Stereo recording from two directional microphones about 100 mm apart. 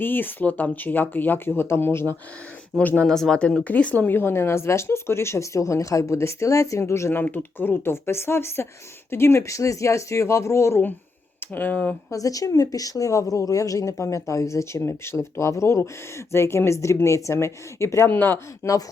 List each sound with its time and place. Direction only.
0.0 s speech: 20° left (ahead or behind)
2.7 s speech: 10° left (ahead or behind)
12.1 s speech: 35° left (ahead or behind)